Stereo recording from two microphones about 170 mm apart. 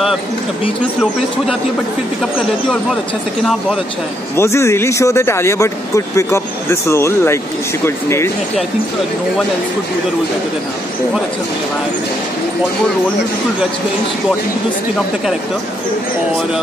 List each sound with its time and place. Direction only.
4.4 s speech: 15° left (ahead or behind)